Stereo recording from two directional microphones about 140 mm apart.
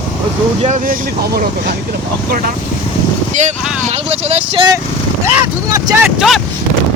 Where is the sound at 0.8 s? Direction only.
90° right.